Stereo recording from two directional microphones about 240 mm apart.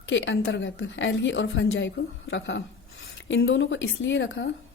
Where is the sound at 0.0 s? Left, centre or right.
Left.